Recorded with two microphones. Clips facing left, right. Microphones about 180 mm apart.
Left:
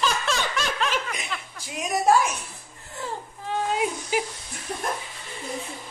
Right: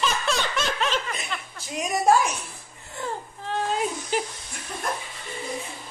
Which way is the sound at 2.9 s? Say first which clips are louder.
Right 1 dB; 5° left (ahead or behind).